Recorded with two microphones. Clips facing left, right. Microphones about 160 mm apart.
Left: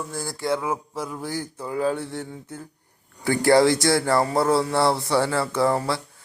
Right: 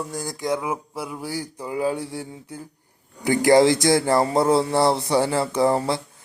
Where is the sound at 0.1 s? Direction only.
15° right (ahead or behind).